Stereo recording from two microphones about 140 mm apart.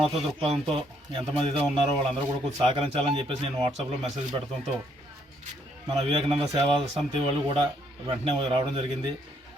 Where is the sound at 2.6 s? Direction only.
40° right (ahead or behind).